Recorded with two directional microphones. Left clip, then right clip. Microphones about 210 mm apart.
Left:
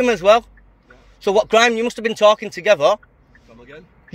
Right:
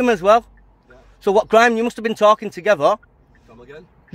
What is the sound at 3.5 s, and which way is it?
Vehicle, 25° right (ahead or behind).